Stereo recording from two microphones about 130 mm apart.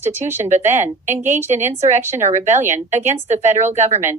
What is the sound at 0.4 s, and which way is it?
A woman's voice, 65° right (ahead or behind).